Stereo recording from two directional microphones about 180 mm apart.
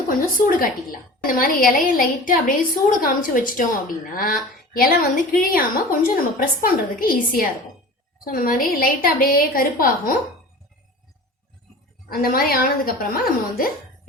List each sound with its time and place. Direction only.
0.1 s a woman's voice: 50° left (ahead or behind)
12.0 s a woman's voice: 55° left (ahead or behind)